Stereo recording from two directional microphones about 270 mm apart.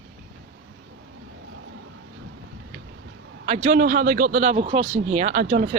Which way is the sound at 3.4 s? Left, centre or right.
Right.